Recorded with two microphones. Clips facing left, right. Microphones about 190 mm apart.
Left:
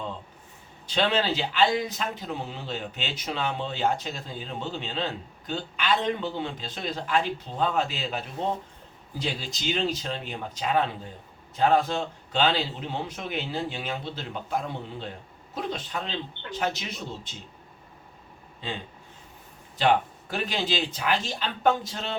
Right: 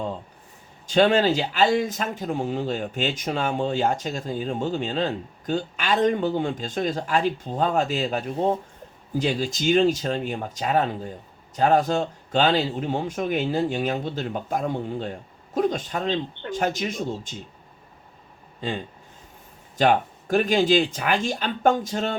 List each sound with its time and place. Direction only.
0.9 s speech: 45° right (ahead or behind)
19.7 s speech: 45° right (ahead or behind)